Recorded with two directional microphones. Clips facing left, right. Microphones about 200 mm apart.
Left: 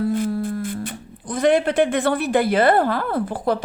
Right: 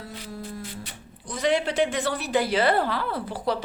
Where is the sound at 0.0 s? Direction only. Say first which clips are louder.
Left 16 dB; 50° left (ahead or behind).